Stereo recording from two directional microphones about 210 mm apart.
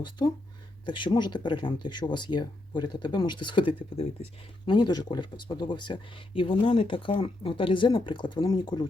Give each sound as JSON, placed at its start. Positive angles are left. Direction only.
{"t": 0.2, "sound": "speech", "side_deg": 20}